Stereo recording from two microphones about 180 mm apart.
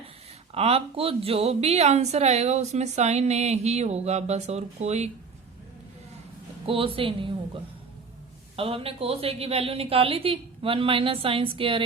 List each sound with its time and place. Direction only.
0.5 s a woman's voice: 35° right (ahead or behind)
6.7 s a woman's voice: 30° right (ahead or behind)
8.5 s a woman's voice: 30° right (ahead or behind)